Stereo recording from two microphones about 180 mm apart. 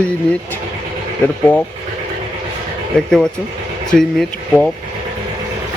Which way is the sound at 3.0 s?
5° left (ahead or behind).